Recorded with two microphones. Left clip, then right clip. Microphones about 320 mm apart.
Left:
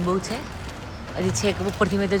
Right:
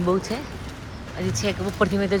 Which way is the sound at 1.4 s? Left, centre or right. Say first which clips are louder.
Right 1 dB; centre.